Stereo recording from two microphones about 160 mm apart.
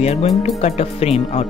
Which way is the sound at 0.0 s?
40° left (ahead or behind).